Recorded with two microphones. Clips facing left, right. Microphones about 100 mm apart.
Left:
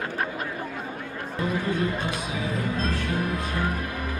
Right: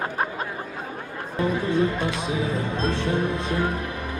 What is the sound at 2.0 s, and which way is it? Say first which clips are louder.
Speech: right 4 dB; 25° right (ahead or behind).